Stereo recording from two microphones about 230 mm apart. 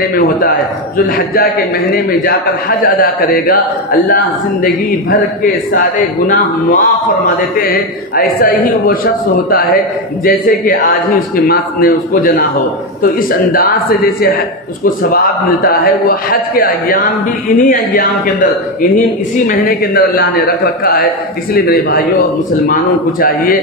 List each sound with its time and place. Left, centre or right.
1.1 s a man's voice: left
2.8 s a man's voice: left
5.4 s a man's voice: left
13.5 s a man's voice: left
23.2 s a man's voice: left